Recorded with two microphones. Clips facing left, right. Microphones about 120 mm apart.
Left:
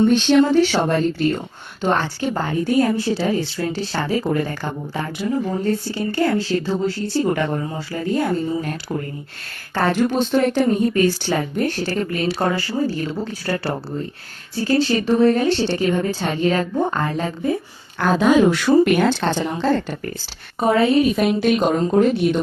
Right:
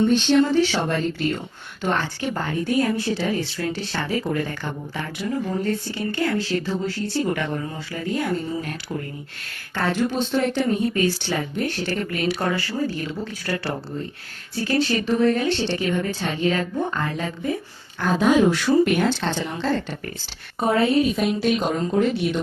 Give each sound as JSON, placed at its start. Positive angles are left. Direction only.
{"t": 0.4, "sound": "a woman's voice", "side_deg": 45}
{"t": 9.7, "sound": "a woman's voice", "side_deg": 50}
{"t": 18.0, "sound": "speech", "side_deg": 80}
{"t": 19.0, "sound": "speech", "side_deg": 45}
{"t": 20.6, "sound": "a woman's voice", "side_deg": 90}
{"t": 21.8, "sound": "speech", "side_deg": 45}